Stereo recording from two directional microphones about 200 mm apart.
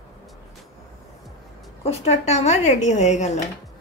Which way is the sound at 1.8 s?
30° left (ahead or behind).